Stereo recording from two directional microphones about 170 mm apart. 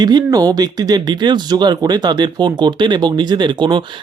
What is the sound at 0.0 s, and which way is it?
Speech, 25° right (ahead or behind).